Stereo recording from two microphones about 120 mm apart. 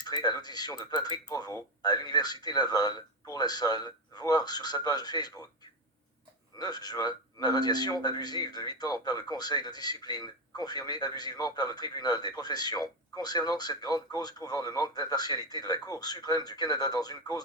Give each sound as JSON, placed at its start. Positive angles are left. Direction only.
{"t": 0.0, "sound": "speech", "side_deg": 35}
{"t": 6.6, "sound": "speech", "side_deg": 35}